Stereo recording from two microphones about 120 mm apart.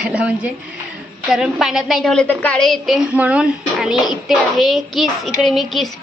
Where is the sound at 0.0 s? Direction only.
10° right (ahead or behind).